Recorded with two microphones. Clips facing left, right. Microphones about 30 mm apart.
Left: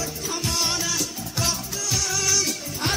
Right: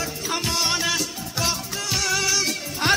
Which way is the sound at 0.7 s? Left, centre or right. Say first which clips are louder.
Right 3 dB; right.